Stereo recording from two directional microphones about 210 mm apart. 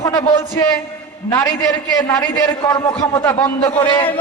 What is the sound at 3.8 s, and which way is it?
Speech, 25° left (ahead or behind).